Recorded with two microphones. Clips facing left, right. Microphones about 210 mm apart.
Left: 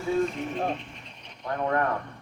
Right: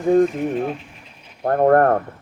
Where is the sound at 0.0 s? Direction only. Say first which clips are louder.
Right 10 dB; 15° right (ahead or behind).